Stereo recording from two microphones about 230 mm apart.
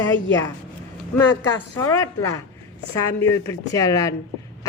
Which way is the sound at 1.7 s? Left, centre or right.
Centre.